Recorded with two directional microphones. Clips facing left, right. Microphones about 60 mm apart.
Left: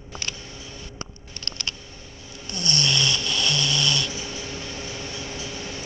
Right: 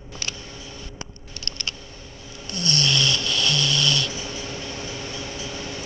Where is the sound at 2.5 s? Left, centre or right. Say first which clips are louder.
Right 1 dB; left.